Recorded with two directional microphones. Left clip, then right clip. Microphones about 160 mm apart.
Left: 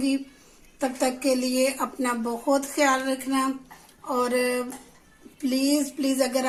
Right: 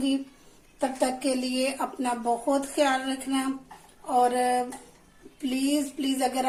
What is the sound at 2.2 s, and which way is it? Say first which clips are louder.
Speech: even; 45° left (ahead or behind).